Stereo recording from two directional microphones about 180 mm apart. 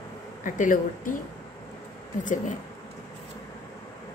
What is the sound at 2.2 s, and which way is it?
Speech, 45° left (ahead or behind).